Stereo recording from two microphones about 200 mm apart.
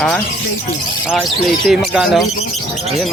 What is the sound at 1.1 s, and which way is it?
Speech, centre (ahead or behind).